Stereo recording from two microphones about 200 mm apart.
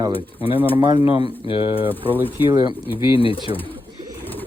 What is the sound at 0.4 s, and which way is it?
Speech, 25° left (ahead or behind).